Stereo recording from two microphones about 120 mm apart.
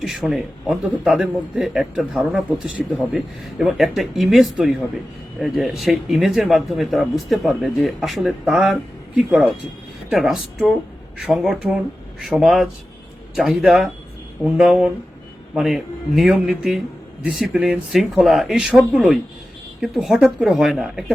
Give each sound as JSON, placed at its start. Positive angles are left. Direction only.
{"t": 0.0, "sound": "speech", "side_deg": 0}